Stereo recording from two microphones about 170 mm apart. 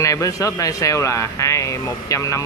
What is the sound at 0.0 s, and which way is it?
Speech, 20° left (ahead or behind).